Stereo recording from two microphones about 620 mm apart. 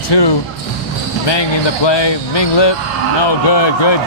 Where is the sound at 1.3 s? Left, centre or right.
Left.